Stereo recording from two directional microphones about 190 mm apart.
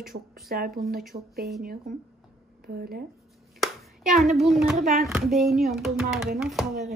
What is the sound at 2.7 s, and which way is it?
Speech, 50° right (ahead or behind).